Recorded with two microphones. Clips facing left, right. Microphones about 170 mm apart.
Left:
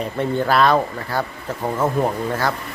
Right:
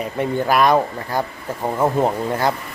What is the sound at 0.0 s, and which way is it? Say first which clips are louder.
Speech: even; 10° right (ahead or behind).